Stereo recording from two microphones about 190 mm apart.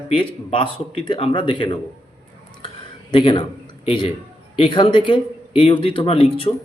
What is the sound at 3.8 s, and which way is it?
A man's voice, 25° left (ahead or behind).